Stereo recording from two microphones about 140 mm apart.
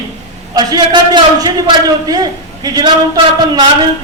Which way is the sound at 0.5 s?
30° right (ahead or behind).